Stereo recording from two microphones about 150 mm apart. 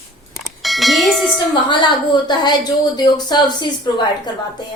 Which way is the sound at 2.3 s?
30° left (ahead or behind).